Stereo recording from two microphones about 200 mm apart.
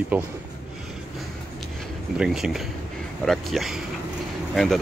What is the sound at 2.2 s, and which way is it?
Speech, centre (ahead or behind).